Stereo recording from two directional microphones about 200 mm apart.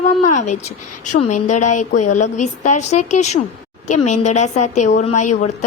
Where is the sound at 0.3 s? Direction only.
35° left (ahead or behind).